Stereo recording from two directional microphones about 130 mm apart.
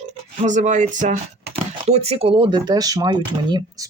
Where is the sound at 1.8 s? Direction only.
50° right (ahead or behind); by 3.8 s 30° right (ahead or behind).